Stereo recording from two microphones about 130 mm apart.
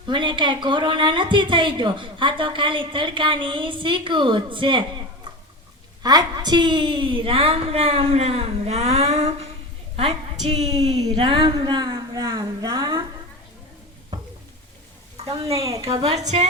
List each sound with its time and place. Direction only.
0.1 s a woman's voice: 35° right (ahead or behind)
6.0 s a woman's voice: 30° right (ahead or behind); by 9.5 s 55° right (ahead or behind)
10.7 s a woman's voice: 35° right (ahead or behind)
10.9 s a woman's voice: 45° right (ahead or behind); by 13.0 s 30° right (ahead or behind)
15.2 s a woman's voice: 45° right (ahead or behind)
15.6 s a woman's voice: 25° right (ahead or behind)
15.9 s a woman's voice: 50° right (ahead or behind)